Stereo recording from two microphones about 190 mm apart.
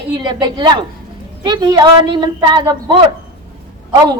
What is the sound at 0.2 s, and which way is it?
A woman's voice, 25° right (ahead or behind).